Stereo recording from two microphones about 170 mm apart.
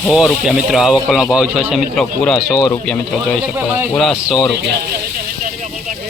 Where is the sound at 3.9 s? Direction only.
Centre (ahead or behind).